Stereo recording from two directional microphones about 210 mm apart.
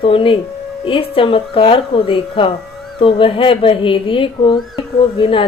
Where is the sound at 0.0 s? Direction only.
25° left (ahead or behind).